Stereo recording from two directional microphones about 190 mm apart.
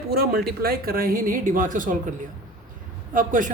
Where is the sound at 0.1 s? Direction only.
55° right (ahead or behind).